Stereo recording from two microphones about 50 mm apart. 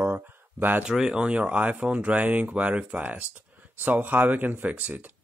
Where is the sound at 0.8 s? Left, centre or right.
Centre; by 5.0 s right.